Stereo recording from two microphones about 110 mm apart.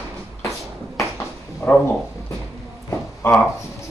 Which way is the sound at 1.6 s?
20° left (ahead or behind).